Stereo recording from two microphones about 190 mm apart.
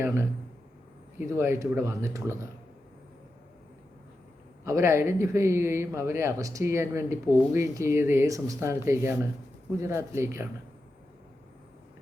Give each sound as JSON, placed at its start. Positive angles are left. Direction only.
{"t": 0.0, "sound": "a man's voice", "side_deg": -15}
{"t": 1.3, "sound": "a man's voice", "side_deg": -15}
{"t": 4.6, "sound": "a man's voice", "side_deg": -15}